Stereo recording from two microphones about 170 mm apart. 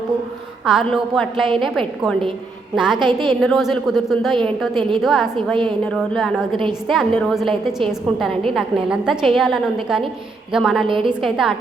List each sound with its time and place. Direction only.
0.6 s a woman's voice: centre (ahead or behind)
3.0 s a woman's voice: 25° right (ahead or behind)
3.4 s a woman's voice: centre (ahead or behind)
10.8 s a woman's voice: 30° right (ahead or behind)
11.1 s a woman's voice: centre (ahead or behind)